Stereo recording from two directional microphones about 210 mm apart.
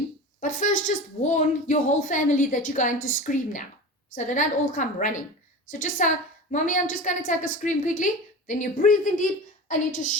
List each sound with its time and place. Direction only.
0.3 s a woman's voice: 40° left (ahead or behind)